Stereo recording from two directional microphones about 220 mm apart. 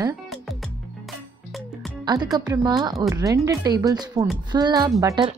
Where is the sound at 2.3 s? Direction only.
15° right (ahead or behind).